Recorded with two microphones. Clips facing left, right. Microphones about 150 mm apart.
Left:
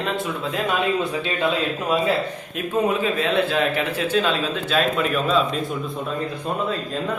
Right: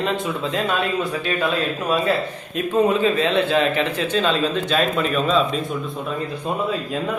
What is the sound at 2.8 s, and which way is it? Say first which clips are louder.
A man's voice: right 3 dB; 5° left (ahead or behind).